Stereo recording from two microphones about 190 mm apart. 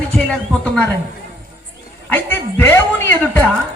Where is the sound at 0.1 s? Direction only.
5° left (ahead or behind).